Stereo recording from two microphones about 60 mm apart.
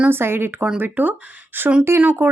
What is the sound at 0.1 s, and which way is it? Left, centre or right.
Speech, right.